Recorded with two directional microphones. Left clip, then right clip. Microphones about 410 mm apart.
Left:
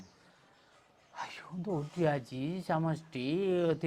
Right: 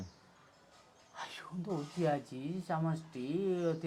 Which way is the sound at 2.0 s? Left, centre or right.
Left.